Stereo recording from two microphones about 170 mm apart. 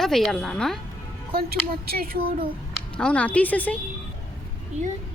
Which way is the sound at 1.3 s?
60° right (ahead or behind).